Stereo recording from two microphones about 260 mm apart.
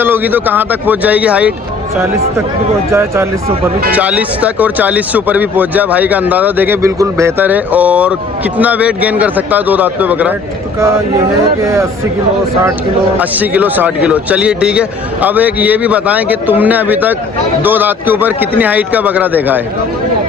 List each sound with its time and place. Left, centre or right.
0.0 s speech: centre
3.9 s speech: centre
11.6 s speech: centre
13.1 s speech: centre